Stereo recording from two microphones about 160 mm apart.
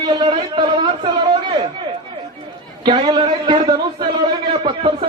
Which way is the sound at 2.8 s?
25° right (ahead or behind).